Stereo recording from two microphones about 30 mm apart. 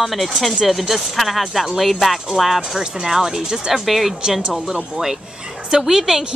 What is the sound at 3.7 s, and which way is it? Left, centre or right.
Speech, centre.